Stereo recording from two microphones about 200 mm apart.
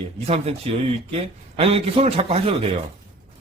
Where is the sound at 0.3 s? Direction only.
30° right (ahead or behind).